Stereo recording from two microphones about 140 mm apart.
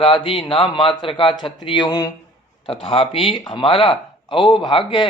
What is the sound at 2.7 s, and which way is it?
Speech, 40° left (ahead or behind).